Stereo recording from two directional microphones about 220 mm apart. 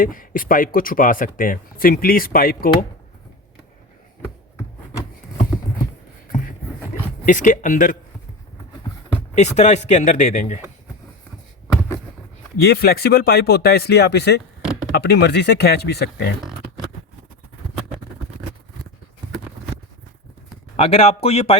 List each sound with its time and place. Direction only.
0.0 s speech: 40° left (ahead or behind)
7.3 s speech: 35° left (ahead or behind)
9.3 s speech: 30° left (ahead or behind)
12.6 s speech: 45° left (ahead or behind)
14.6 s a sound: 5° right (ahead or behind)
14.9 s speech: 50° left (ahead or behind)
20.7 s speech: 25° left (ahead or behind)